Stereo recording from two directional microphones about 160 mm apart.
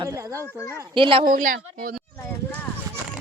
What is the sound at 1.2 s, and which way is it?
Speech, 60° right (ahead or behind).